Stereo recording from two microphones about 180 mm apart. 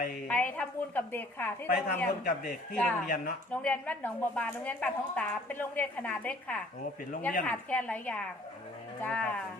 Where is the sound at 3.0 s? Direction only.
55° left (ahead or behind).